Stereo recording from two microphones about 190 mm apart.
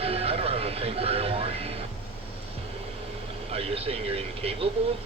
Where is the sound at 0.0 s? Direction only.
30° right (ahead or behind).